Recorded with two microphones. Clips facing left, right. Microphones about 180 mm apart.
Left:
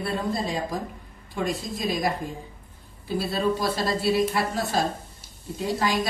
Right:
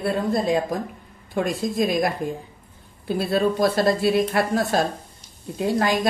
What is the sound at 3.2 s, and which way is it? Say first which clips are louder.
Speech: right 5 dB; 55° right (ahead or behind).